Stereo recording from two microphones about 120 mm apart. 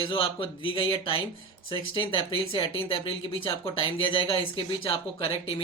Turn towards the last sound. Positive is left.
turn(degrees=50)  # may be behind; listen again after turning